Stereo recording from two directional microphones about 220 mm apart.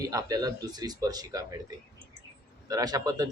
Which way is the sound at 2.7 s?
15° right (ahead or behind).